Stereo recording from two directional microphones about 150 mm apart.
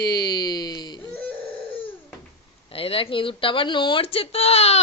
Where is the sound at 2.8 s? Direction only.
40° left (ahead or behind).